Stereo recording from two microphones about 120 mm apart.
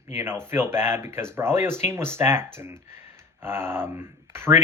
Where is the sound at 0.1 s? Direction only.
20° right (ahead or behind).